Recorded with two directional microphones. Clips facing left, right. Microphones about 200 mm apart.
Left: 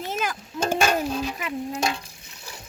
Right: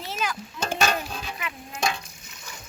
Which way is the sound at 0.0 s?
50° left (ahead or behind).